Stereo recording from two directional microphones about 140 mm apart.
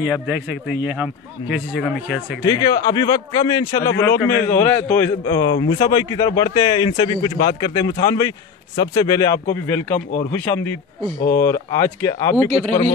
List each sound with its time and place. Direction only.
0.0 s a man's voice: 10° right (ahead or behind)
2.4 s a man's voice: 25° left (ahead or behind)
12.4 s speech: 45° right (ahead or behind)